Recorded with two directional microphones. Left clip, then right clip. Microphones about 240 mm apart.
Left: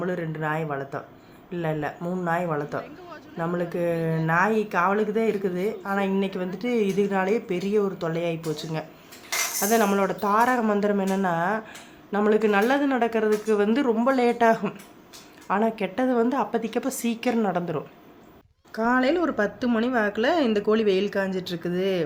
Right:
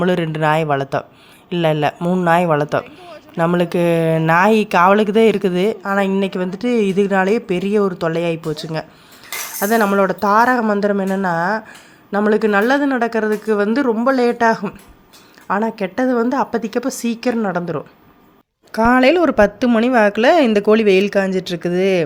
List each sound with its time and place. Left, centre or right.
0.0 s speech: right
18.7 s speech: right